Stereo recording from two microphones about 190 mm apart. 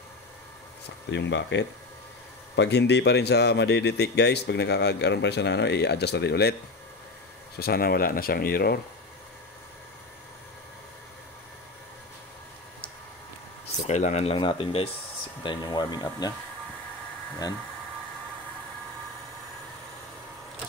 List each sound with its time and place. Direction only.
1.1 s speech: 70° left (ahead or behind)
7.5 s speech: 55° left (ahead or behind)
13.8 s speech: 35° left (ahead or behind); by 16.3 s 20° left (ahead or behind)